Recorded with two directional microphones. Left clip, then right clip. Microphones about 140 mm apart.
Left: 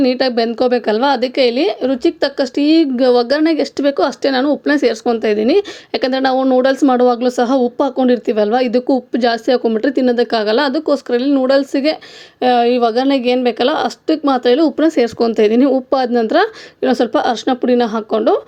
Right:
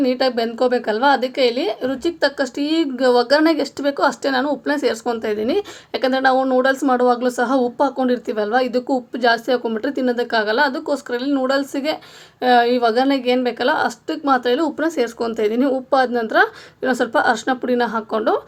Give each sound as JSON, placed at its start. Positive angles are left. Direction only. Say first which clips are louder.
{"t": 0.0, "sound": "speech", "louder": "left 4 dB", "side_deg": 35}